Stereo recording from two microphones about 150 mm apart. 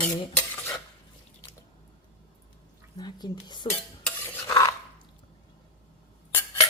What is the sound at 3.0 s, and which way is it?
Speech, 30° left (ahead or behind).